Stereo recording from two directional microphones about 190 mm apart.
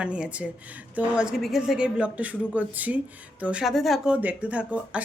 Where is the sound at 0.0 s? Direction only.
5° right (ahead or behind).